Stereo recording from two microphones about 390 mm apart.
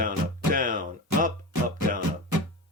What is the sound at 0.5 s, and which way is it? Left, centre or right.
Music, right.